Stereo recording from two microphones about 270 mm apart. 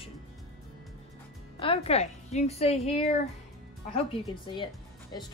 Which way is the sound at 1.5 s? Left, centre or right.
Left.